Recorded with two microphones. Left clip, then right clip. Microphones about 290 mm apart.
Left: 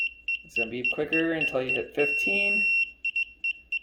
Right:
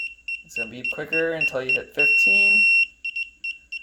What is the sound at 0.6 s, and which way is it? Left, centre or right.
Speech, right.